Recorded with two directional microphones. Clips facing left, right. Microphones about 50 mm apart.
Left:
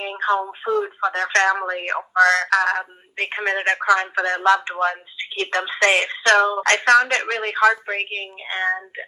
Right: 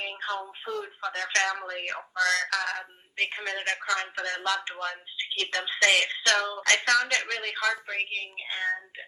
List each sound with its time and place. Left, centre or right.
0.0 s speech: left